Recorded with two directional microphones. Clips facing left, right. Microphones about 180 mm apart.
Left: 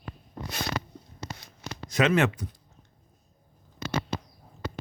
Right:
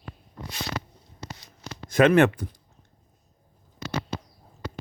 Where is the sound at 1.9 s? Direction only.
55° right (ahead or behind).